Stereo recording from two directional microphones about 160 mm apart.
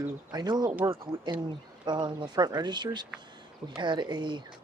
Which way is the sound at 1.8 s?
30° right (ahead or behind).